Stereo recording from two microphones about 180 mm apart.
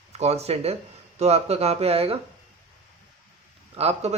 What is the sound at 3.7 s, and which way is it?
Speech, 35° right (ahead or behind).